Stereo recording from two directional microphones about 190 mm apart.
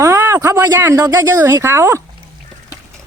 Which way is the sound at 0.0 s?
15° right (ahead or behind).